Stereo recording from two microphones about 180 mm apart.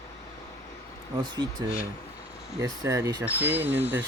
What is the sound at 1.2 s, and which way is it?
Speech, 25° right (ahead or behind).